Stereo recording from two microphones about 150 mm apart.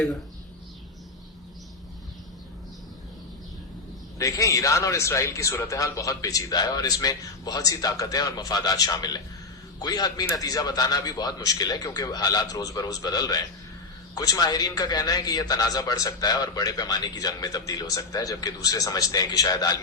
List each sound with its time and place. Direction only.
4.2 s a man's voice: 20° left (ahead or behind)